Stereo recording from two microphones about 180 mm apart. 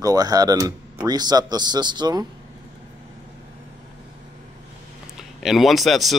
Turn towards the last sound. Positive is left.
turn(degrees=0)  # may be behind; listen again after turning